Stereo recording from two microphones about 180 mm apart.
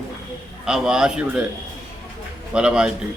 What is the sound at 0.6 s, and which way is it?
Speech, 5° right (ahead or behind).